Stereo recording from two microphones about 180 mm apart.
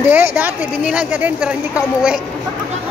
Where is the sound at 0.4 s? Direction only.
5° right (ahead or behind).